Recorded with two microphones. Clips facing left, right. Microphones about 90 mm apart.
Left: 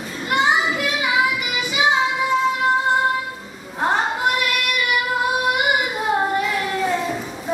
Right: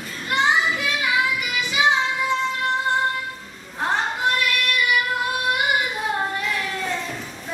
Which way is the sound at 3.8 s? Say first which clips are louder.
Left 3 dB; 10° left (ahead or behind).